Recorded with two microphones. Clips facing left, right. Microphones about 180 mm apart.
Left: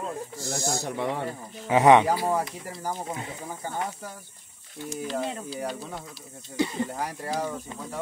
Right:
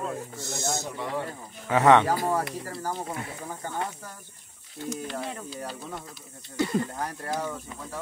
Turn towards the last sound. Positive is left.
turn(degrees=10)  # may be behind; listen again after turning